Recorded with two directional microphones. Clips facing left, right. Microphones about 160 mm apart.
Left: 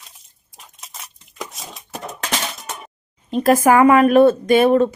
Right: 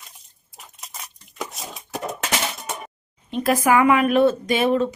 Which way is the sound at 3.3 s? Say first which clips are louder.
Left 5 dB; 40° left (ahead or behind).